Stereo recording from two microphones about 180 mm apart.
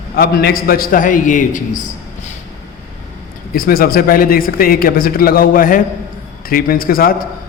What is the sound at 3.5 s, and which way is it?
A man's voice, 55° left (ahead or behind).